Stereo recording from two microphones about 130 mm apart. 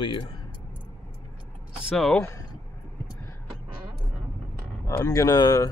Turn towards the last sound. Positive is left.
turn(degrees=30)  # may be behind; listen again after turning